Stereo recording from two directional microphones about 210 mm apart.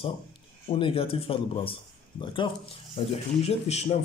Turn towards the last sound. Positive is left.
turn(degrees=30)  # may be behind; listen again after turning